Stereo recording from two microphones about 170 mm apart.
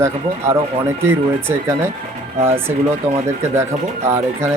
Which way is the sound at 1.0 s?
15° right (ahead or behind).